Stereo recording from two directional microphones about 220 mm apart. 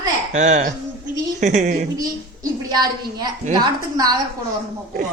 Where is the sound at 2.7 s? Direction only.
20° right (ahead or behind).